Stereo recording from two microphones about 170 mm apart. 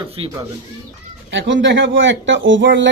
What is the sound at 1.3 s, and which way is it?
Speech, 90° right.